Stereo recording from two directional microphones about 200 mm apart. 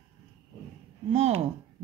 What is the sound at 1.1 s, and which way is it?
Speech, 30° right (ahead or behind).